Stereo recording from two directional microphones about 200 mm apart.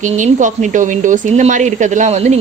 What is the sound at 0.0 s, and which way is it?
A woman's voice, 40° right (ahead or behind).